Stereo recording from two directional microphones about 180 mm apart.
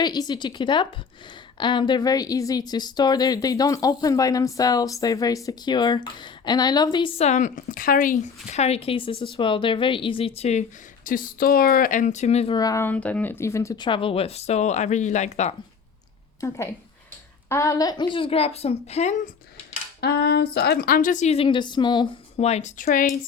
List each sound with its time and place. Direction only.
0.0 s a woman's voice: 25° left (ahead or behind); by 8.1 s 50° left (ahead or behind)
8.4 s a woman's voice: 35° left (ahead or behind)
12.5 s a woman's voice: 20° left (ahead or behind); by 15.5 s 40° left (ahead or behind)
17.5 s a woman's voice: 15° left (ahead or behind); by 19.3 s 40° left (ahead or behind)
20.0 s a woman's voice: 60° left (ahead or behind); by 22.1 s 25° left (ahead or behind)
22.4 s a woman's voice: 35° left (ahead or behind)